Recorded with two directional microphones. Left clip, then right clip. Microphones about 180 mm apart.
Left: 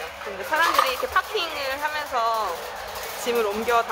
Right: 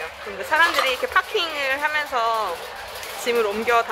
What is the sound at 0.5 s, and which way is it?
Speech, 10° right (ahead or behind).